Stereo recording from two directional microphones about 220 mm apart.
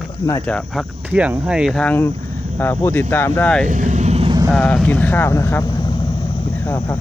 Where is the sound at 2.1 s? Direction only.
30° right (ahead or behind).